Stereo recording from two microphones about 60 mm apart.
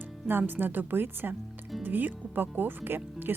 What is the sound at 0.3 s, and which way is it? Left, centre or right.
Speech, right.